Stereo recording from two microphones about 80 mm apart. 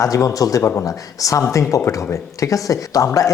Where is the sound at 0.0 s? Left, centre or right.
Left.